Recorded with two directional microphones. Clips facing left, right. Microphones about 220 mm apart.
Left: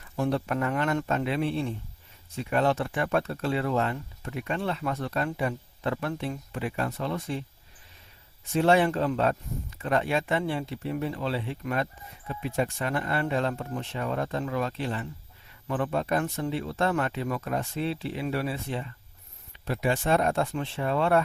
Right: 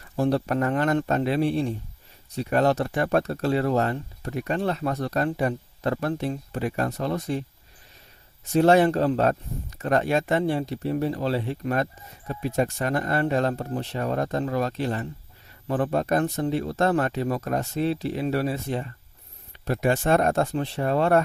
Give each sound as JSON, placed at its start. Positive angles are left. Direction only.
{"t": 0.2, "sound": "speech", "side_deg": -35}
{"t": 8.5, "sound": "speech", "side_deg": -40}